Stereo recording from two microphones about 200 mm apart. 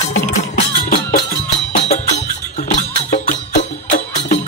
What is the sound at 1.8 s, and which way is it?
Music, 35° left (ahead or behind).